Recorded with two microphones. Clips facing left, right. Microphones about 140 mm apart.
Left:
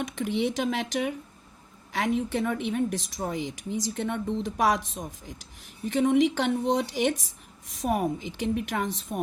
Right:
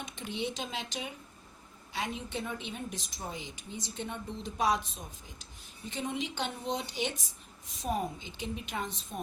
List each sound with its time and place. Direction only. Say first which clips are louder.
0.0 s a woman's voice: left 9 dB; 90° left
3.2 s speech: left 10 dB; 75° left (ahead or behind); by 7.2 s 90° left
7.8 s a woman's voice: left 7 dB; 75° left (ahead or behind)